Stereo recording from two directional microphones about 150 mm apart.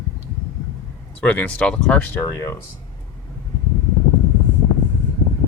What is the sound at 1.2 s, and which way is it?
Speech, 10° left (ahead or behind).